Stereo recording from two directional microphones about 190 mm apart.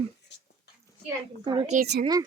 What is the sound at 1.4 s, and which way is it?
Speech, 25° right (ahead or behind).